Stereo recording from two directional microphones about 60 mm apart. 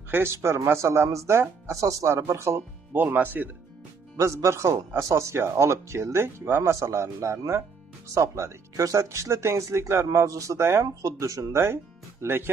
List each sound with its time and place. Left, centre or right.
0.1 s a man's voice: right
1.0 s speech: right
2.9 s speech: right
4.2 s a man's voice: right
6.7 s speech: right
10.6 s a man's voice: right
11.0 s speech: right
11.6 s speech: right